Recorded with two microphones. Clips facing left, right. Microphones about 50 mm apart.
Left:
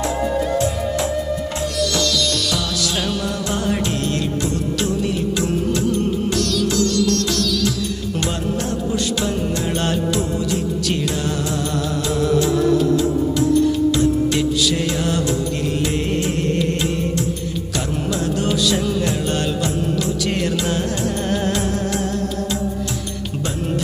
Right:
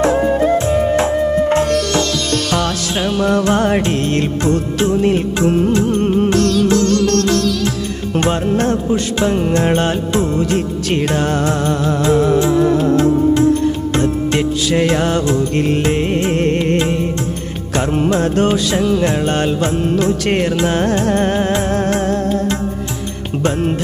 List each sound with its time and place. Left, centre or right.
0.0 s music: right
2.9 s music: right
3.2 s music: right
9.8 s music: right